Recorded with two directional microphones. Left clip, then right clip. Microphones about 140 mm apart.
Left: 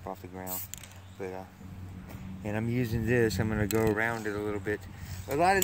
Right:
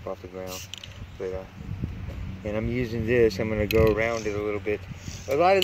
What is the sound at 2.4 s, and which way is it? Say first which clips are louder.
Speech: right 4 dB; 90° left.